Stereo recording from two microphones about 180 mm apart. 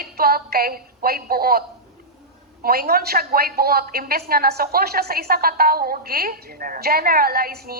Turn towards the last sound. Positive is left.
turn(degrees=-55)  # may be behind; listen again after turning